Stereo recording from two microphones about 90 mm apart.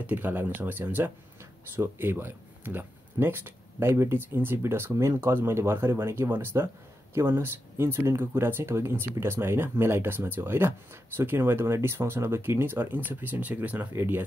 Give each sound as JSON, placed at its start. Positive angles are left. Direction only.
{"t": 0.0, "sound": "speech", "side_deg": -20}